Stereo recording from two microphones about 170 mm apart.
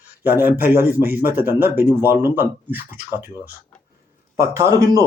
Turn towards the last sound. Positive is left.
turn(degrees=-20)  # may be behind; listen again after turning